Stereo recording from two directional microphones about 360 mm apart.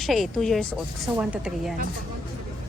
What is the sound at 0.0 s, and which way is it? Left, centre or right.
A woman's voice, centre.